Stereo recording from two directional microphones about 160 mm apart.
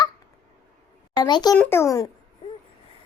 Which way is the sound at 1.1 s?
25° left (ahead or behind).